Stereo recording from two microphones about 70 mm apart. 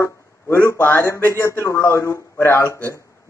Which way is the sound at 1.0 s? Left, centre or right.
Left.